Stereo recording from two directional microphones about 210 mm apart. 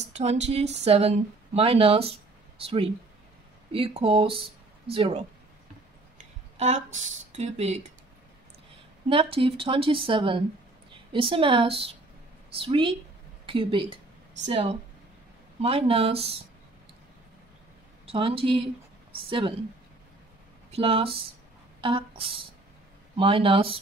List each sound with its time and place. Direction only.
0.1 s speech: 30° right (ahead or behind)
6.6 s speech: 35° right (ahead or behind)
9.1 s a woman's voice: 25° right (ahead or behind)
18.0 s speech: 25° right (ahead or behind)
20.7 s speech: 25° right (ahead or behind)